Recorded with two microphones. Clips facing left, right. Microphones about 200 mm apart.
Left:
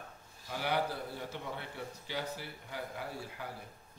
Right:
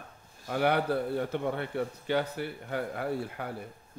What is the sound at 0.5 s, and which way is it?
A man's voice, 60° right (ahead or behind).